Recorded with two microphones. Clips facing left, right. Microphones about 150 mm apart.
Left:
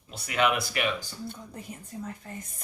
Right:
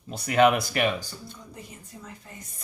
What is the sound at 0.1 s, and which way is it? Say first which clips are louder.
Speech: right 6 dB; 40° right (ahead or behind).